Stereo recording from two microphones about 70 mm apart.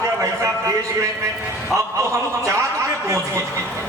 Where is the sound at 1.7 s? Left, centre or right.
Right.